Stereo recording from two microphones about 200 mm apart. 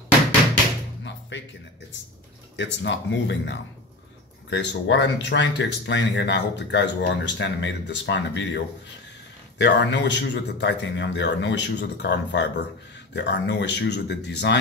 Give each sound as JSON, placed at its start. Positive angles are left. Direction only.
{"t": 1.3, "sound": "speech", "side_deg": 65}
{"t": 2.5, "sound": "speech", "side_deg": 60}